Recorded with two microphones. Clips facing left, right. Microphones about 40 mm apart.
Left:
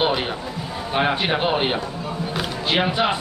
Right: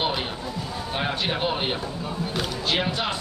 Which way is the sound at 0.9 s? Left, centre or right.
Left.